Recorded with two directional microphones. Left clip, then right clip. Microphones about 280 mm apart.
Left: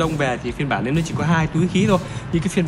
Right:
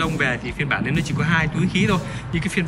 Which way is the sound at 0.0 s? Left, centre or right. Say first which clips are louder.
Left 1 dB; centre.